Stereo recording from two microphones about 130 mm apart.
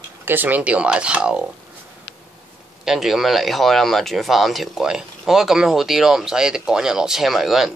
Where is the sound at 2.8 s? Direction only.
Centre (ahead or behind).